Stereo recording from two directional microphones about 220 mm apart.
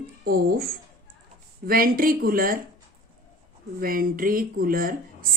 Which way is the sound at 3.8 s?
40° right (ahead or behind).